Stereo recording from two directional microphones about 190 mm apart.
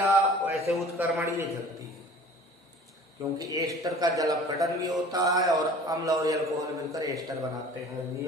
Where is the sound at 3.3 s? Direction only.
20° right (ahead or behind).